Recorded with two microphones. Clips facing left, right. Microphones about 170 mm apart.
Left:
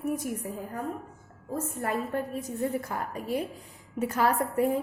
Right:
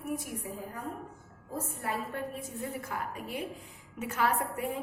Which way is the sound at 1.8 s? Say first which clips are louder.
Left 5 dB; 40° left (ahead or behind).